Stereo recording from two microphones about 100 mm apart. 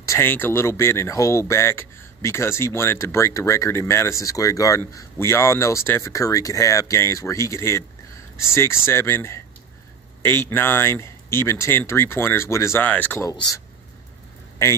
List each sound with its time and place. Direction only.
0.0 s a sound: 30° left (ahead or behind)
0.3 s speech: 25° left (ahead or behind)
12.8 s speech: 15° left (ahead or behind)
14.6 s speech: 25° left (ahead or behind)